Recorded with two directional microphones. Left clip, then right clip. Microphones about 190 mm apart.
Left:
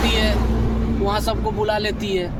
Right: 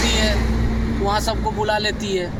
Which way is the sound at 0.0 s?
35° left (ahead or behind).